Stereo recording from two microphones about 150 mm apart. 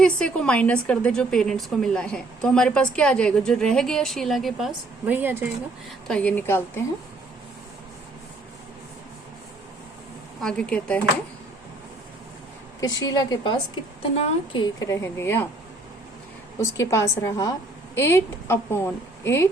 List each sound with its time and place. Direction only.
0.0 s a woman's voice: 5° left (ahead or behind)
5.0 s speech: 10° right (ahead or behind)
6.1 s a woman's voice: 10° left (ahead or behind)
10.4 s a woman's voice: 5° left (ahead or behind)
12.8 s a woman's voice: 25° left (ahead or behind)
16.6 s a woman's voice: 20° left (ahead or behind)